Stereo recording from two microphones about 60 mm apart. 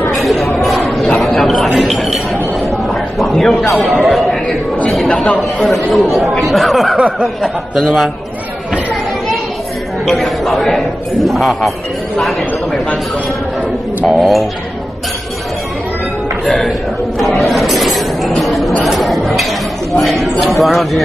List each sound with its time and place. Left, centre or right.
0.1 s a sound: centre
0.6 s chatter: centre
1.1 s a sound: centre
3.7 s chatter: centre
5.0 s speech: centre
5.6 s speech: centre
7.0 s speech: centre
7.4 s speech: centre
10.0 s speech: centre
14.0 s speech: centre
16.4 s speech: centre
17.2 s a sound: centre
18.9 s speech: centre